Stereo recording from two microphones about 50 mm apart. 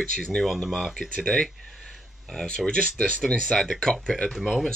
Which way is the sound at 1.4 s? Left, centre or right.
Centre.